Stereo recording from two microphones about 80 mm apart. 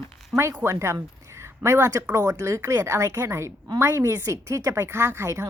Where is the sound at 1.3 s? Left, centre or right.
Right.